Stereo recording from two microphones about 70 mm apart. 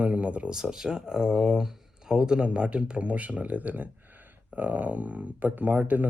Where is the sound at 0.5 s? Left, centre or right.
Centre.